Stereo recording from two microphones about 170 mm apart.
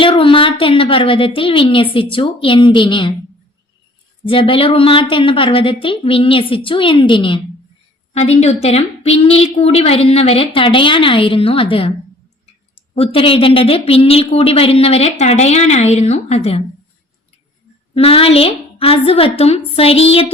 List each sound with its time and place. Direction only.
0.0 s a woman's voice: 30° left (ahead or behind)
4.2 s a woman's voice: 30° left (ahead or behind)
17.9 s a woman's voice: 35° left (ahead or behind)